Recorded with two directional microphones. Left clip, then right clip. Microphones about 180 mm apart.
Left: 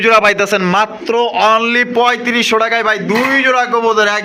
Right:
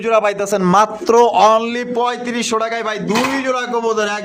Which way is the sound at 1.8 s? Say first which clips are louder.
Left 6 dB; 5° left (ahead or behind).